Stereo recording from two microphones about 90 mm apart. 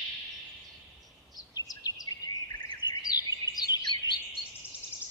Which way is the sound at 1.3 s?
45° left (ahead or behind).